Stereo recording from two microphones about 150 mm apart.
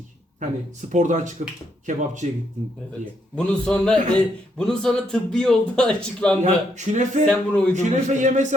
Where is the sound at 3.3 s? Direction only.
5° left (ahead or behind).